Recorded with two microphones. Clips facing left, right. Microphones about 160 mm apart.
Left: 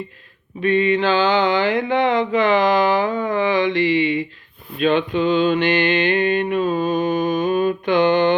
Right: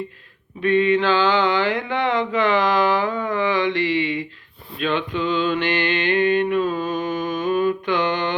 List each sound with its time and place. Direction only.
0.6 s mantra: 10° left (ahead or behind)